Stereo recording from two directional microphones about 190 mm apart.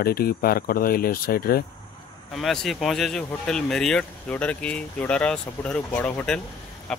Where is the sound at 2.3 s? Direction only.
Centre (ahead or behind).